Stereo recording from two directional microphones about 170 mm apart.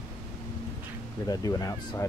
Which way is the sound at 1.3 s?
20° left (ahead or behind).